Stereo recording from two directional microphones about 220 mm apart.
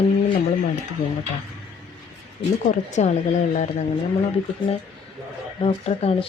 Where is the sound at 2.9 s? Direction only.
30° left (ahead or behind).